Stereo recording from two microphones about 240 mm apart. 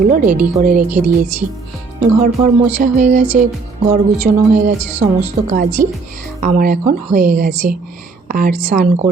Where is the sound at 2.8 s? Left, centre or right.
Right.